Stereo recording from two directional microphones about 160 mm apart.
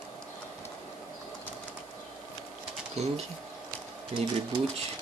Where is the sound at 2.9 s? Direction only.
40° right (ahead or behind).